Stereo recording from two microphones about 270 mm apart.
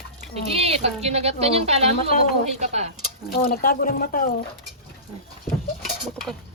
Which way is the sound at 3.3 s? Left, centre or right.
Left.